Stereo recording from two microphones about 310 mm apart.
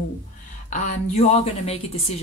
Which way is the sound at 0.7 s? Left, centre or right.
Left.